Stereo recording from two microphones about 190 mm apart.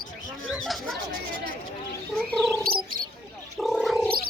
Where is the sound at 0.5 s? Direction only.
Centre (ahead or behind).